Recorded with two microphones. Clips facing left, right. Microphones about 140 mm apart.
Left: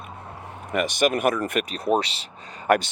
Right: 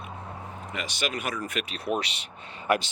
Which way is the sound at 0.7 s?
55° left (ahead or behind).